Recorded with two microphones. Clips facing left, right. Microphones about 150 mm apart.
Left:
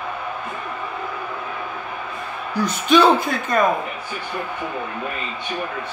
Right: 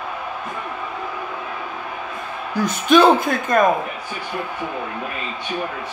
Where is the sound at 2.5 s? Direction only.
50° right (ahead or behind).